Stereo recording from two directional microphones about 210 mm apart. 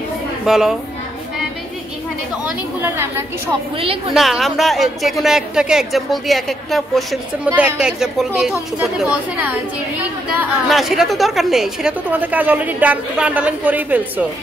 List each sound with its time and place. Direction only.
0.5 s speech: centre (ahead or behind)
2.4 s a woman's voice: 10° right (ahead or behind)
3.7 s a woman's voice: 25° right (ahead or behind)
4.1 s speech: centre (ahead or behind)
10.7 s a woman's voice: centre (ahead or behind)